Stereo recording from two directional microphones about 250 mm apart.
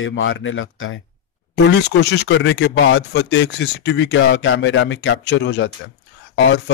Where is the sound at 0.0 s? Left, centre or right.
Left.